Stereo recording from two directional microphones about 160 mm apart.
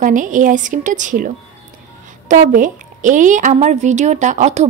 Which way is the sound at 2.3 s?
55° right (ahead or behind).